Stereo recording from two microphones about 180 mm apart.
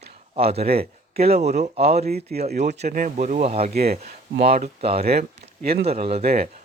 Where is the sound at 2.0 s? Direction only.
60° right (ahead or behind).